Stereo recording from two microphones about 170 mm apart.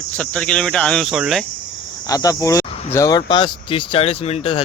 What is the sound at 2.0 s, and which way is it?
Speech, 20° left (ahead or behind).